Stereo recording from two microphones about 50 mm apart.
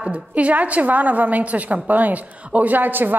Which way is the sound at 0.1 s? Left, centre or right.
Right.